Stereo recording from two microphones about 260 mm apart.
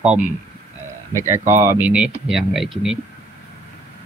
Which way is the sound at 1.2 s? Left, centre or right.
Centre.